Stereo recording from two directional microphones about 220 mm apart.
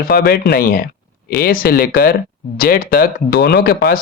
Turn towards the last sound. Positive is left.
turn(degrees=45)  # may be behind; listen again after turning